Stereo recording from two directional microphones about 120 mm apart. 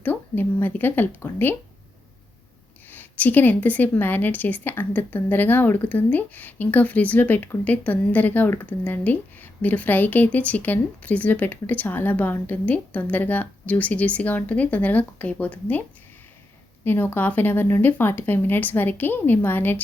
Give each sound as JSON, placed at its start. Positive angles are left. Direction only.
{"t": 0.0, "sound": "a woman's voice", "side_deg": 15}
{"t": 2.9, "sound": "a woman's voice", "side_deg": 15}
{"t": 16.8, "sound": "a woman's voice", "side_deg": 15}